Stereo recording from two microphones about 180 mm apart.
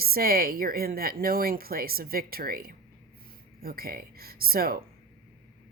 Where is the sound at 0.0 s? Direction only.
55° right (ahead or behind).